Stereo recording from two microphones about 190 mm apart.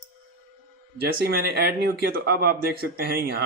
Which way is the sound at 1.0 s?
55° right (ahead or behind).